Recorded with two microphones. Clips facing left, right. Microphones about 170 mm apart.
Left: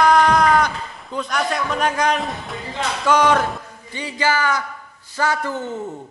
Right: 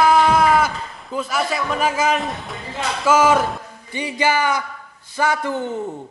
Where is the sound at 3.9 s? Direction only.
15° right (ahead or behind).